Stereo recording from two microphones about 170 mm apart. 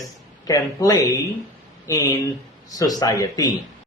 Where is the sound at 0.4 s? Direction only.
20° left (ahead or behind).